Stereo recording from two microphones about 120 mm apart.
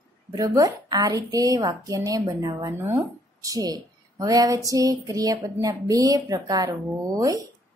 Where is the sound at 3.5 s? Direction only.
30° right (ahead or behind).